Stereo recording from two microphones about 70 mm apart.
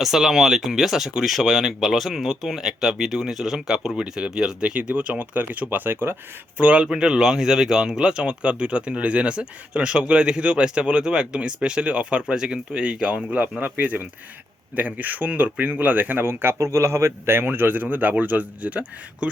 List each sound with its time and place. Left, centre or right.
0.0 s speech: centre; by 6.1 s right
6.6 s speech: centre